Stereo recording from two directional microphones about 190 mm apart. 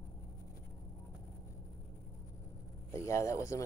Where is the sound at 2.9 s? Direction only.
15° left (ahead or behind).